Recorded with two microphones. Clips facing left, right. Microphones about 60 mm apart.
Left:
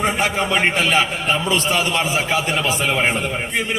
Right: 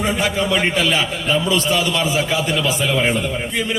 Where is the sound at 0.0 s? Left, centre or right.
Left.